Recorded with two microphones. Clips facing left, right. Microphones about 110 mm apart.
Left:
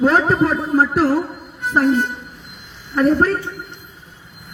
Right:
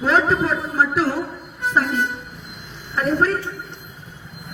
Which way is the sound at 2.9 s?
45° left (ahead or behind).